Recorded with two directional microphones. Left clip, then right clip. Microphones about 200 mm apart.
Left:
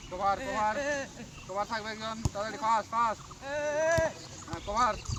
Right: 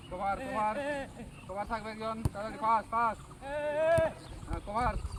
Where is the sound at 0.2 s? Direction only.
45° right (ahead or behind).